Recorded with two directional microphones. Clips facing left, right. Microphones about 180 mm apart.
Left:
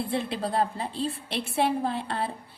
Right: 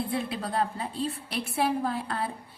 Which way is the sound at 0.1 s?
30° left (ahead or behind).